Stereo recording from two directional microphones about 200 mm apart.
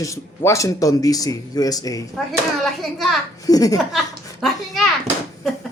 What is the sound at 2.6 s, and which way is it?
Speech, centre (ahead or behind).